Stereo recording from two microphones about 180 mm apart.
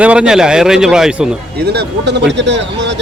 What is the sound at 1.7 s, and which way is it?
Speech, 70° right (ahead or behind).